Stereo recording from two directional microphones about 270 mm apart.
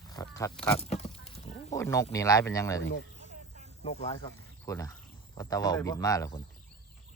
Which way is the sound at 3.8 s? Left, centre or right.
Left.